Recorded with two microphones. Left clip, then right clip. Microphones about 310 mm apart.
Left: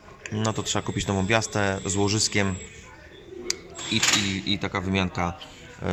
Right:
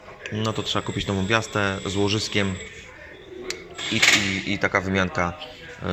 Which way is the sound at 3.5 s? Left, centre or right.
Centre.